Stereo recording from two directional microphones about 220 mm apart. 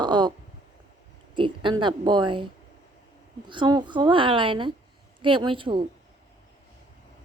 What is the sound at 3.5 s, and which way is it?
A woman's voice, 20° right (ahead or behind).